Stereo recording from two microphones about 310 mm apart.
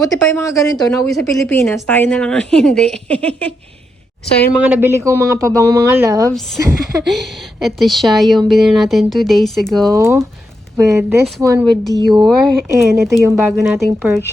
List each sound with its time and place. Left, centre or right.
0.0 s a woman's voice: centre
4.6 s a woman's voice: centre